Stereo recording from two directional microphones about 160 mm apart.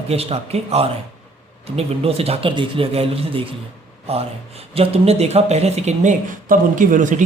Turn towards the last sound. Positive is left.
turn(degrees=-55)  # may be behind; listen again after turning